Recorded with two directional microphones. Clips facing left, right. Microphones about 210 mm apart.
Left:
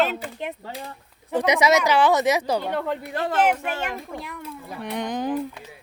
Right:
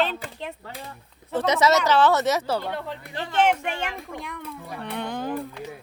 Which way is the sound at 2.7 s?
55° left (ahead or behind).